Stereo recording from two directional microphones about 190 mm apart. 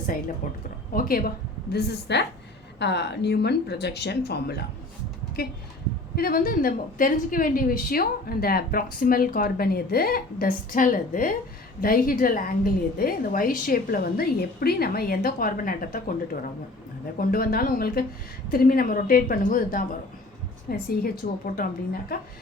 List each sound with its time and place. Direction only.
0.4 s a woman's voice: 45° left (ahead or behind)
1.7 s speech: 60° left (ahead or behind)
6.1 s a woman's voice: 50° left (ahead or behind)
17.2 s a woman's voice: 50° left (ahead or behind)